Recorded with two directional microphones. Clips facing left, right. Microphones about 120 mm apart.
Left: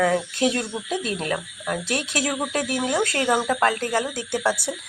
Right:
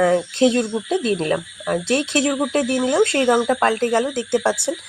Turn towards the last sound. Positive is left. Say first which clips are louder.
# right 5 dB
turn(degrees=-30)  # may be behind; listen again after turning